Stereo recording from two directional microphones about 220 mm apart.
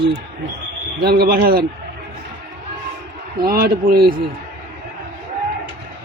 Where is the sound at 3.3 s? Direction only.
40° right (ahead or behind).